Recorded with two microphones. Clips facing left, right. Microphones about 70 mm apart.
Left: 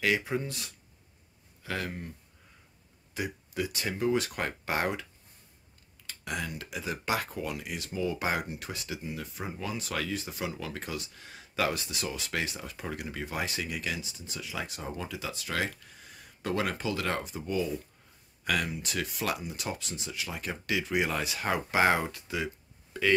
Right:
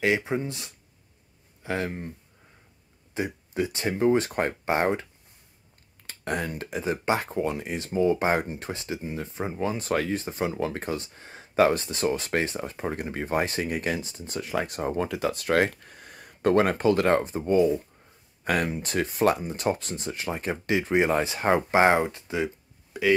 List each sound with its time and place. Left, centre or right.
0.0 s speech: right
3.2 s speech: right
6.0 s speech: right
22.9 s speech: centre